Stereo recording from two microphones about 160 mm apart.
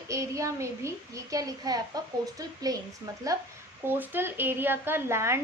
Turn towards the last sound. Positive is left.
turn(degrees=-15)  # may be behind; listen again after turning